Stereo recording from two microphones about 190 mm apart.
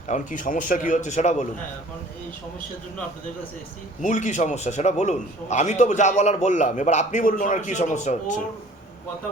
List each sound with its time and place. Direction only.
0.1 s a man's voice: 45° left (ahead or behind)
4.0 s a man's voice: 40° left (ahead or behind)